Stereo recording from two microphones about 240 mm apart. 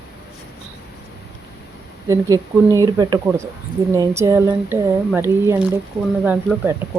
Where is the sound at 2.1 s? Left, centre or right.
Centre.